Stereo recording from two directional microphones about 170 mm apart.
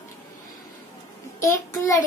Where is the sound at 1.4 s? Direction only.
20° left (ahead or behind).